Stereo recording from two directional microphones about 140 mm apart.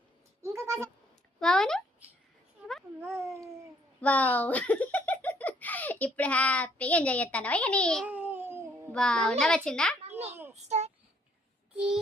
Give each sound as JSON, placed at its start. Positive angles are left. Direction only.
{"t": 0.4, "sound": "bleat", "side_deg": -20}
{"t": 1.4, "sound": "speech", "side_deg": 5}
{"t": 3.0, "sound": "a sound", "side_deg": -20}
{"t": 4.0, "sound": "speech", "side_deg": 10}
{"t": 8.0, "sound": "a sound", "side_deg": -10}
{"t": 8.9, "sound": "a woman's voice", "side_deg": 5}
{"t": 10.5, "sound": "child singing", "side_deg": -55}